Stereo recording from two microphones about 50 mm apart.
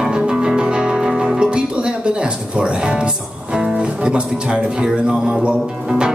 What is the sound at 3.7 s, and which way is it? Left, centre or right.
Speech, right.